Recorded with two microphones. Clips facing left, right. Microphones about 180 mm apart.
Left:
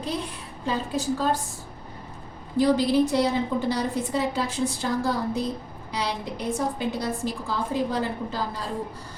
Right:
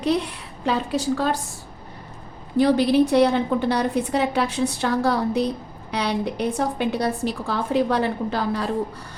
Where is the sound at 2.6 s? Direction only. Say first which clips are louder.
Right 3 dB; 65° right (ahead or behind).